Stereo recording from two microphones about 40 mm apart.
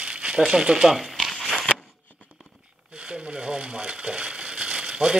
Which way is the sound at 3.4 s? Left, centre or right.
Centre.